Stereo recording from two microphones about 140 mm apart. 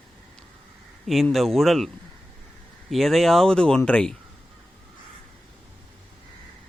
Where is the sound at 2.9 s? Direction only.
Centre (ahead or behind).